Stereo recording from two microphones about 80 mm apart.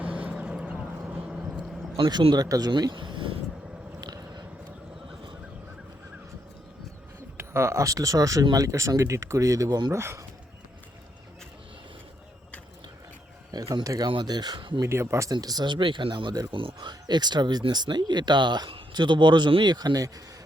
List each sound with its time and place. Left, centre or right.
0.0 s vehicle: centre
1.5 s speech: right
4.0 s a sound: right
7.3 s speech: right
9.9 s speech: right
13.5 s speech: right
14.1 s speech: right
14.8 s speech: right
15.4 s speech: right